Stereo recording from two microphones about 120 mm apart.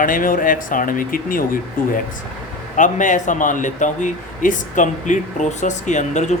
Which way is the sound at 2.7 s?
90° left.